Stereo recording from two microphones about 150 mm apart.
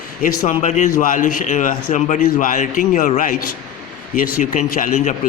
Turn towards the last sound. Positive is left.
turn(degrees=65)  # may be behind; listen again after turning